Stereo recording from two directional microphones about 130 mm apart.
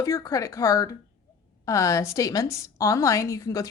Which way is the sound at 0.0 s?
25° left (ahead or behind).